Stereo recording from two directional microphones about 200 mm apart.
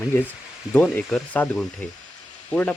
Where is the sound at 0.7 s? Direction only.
5° left (ahead or behind).